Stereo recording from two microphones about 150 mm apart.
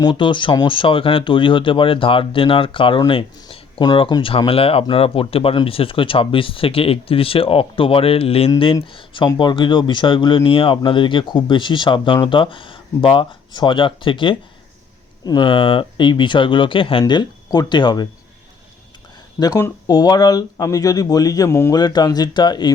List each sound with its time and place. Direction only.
0.0 s speech: 30° left (ahead or behind)
19.5 s speech: 20° left (ahead or behind)